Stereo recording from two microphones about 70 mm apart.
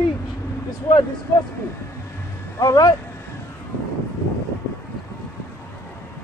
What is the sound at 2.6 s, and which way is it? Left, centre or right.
Speech, left.